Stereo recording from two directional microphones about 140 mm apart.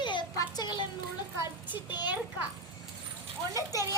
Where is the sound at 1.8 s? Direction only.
30° left (ahead or behind).